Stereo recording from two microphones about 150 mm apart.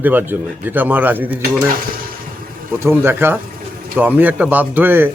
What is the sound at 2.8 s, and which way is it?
Speech, 15° right (ahead or behind).